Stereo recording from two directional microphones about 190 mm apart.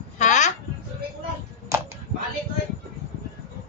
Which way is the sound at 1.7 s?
15° right (ahead or behind).